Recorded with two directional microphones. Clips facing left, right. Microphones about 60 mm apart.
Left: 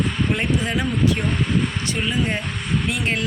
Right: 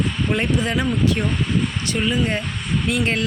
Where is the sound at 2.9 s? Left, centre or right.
Centre.